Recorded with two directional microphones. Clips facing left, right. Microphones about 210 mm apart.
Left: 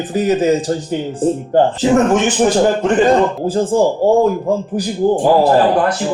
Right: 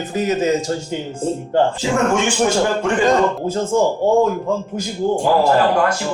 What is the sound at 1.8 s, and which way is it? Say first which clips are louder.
Speech: left 5 dB; 35° left (ahead or behind).